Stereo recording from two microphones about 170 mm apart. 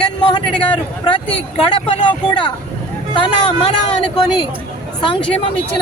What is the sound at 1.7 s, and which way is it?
Speech, 30° left (ahead or behind).